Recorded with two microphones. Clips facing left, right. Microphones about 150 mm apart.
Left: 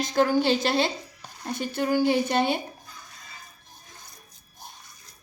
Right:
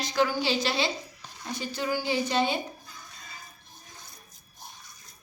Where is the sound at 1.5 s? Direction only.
55° left (ahead or behind).